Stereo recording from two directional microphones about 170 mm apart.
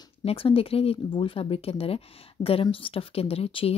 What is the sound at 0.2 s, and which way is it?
Speech, 35° left (ahead or behind).